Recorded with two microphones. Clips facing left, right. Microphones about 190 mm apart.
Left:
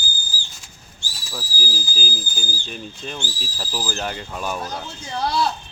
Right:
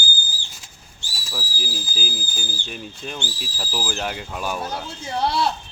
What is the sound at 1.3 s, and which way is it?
Speech, centre (ahead or behind).